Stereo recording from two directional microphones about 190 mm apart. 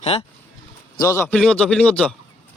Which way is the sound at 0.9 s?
15° left (ahead or behind).